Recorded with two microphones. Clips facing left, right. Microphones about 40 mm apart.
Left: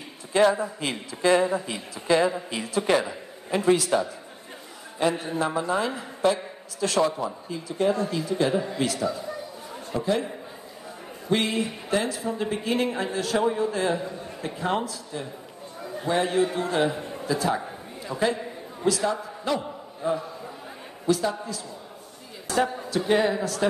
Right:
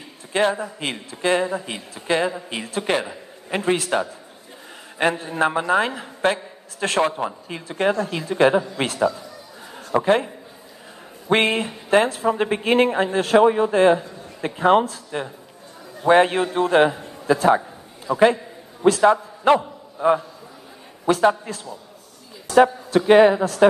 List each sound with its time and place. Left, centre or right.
0.3 s a man's voice: right
9.9 s a man's voice: right
11.2 s a man's voice: right
22.6 s a man's voice: right